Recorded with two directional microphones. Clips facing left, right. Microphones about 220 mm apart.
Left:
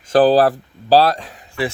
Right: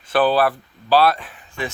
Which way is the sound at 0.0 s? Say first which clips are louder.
Left 5 dB; 40° left (ahead or behind).